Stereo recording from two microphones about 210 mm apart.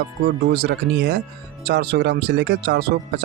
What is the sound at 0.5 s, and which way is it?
Speech, 50° right (ahead or behind).